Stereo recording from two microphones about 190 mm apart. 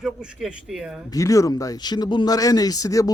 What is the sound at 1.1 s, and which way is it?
Speech, 15° left (ahead or behind).